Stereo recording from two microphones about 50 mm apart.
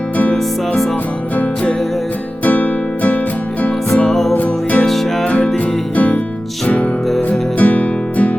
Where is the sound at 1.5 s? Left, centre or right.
Centre.